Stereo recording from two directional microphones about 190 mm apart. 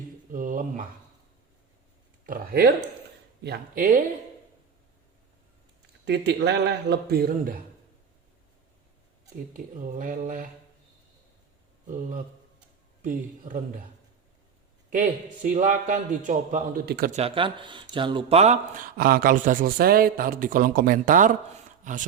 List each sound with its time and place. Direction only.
0.3 s a sound: 45° right (ahead or behind)
2.2 s speech: 50° right (ahead or behind)
6.1 s speech: 65° right (ahead or behind)
9.5 s speech: 45° right (ahead or behind)
11.9 s speech: 45° right (ahead or behind)
15.4 s speech: 45° right (ahead or behind)
16.8 s speech: 55° right (ahead or behind)
17.1 s speech: 35° right (ahead or behind)